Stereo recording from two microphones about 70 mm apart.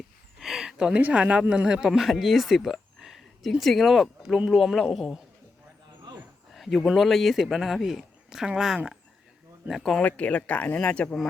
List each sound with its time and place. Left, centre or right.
0.3 s a sound: centre
1.1 s speech: centre
6.5 s speech: centre
10.0 s speech: centre